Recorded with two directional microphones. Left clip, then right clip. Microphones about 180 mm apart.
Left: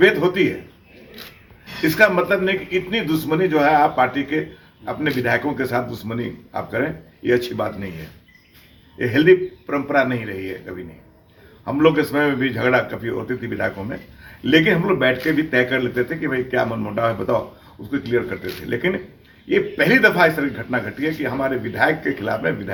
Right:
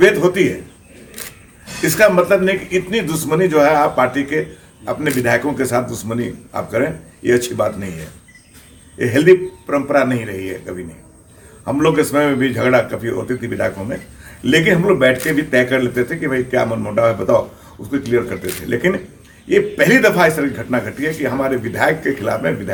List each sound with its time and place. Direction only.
0.0 s a man's voice: 10° right (ahead or behind)
2.0 s a man's voice: 5° right (ahead or behind)
9.0 s a man's voice: 10° right (ahead or behind)